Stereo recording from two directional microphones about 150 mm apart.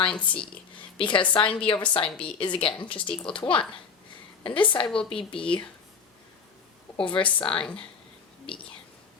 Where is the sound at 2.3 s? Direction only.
30° left (ahead or behind).